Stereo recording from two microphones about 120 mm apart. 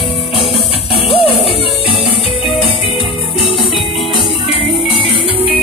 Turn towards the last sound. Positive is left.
turn(degrees=45)  # may be behind; listen again after turning